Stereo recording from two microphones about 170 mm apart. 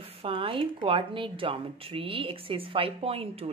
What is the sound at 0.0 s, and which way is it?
Speech, 35° right (ahead or behind).